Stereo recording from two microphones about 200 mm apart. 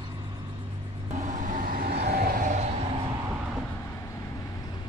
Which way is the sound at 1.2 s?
40° right (ahead or behind).